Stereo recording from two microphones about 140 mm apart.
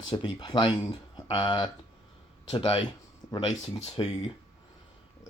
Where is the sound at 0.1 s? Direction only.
35° left (ahead or behind).